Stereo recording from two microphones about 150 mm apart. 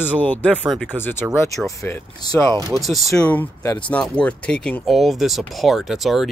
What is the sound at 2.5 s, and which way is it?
Speech, 20° right (ahead or behind).